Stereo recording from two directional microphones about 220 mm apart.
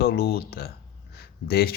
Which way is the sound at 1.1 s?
45° left (ahead or behind).